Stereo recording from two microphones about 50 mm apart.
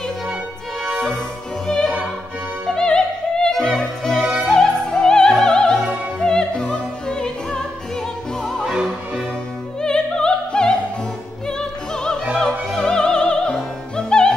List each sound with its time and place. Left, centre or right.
0.9 s music: centre
1.7 s opera: centre
3.4 s music: centre
6.1 s opera: centre
9.8 s music: centre
11.4 s opera: centre
13.9 s music: centre